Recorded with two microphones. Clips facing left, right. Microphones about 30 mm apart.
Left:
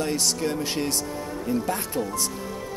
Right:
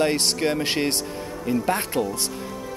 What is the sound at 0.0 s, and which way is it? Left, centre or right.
Speech, right.